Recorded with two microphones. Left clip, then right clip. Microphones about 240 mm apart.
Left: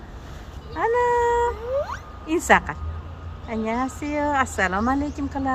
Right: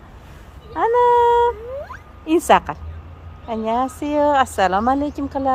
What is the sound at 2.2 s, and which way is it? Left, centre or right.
A woman's voice, right.